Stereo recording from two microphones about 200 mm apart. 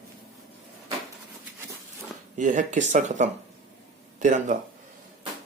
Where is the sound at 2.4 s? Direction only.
40° right (ahead or behind).